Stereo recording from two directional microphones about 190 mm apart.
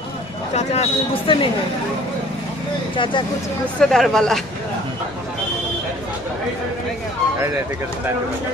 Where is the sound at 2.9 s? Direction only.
25° left (ahead or behind).